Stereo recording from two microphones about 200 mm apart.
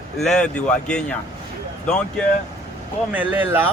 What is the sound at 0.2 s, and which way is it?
Speech, 5° left (ahead or behind).